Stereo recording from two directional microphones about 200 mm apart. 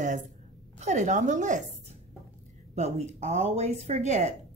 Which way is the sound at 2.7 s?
35° right (ahead or behind).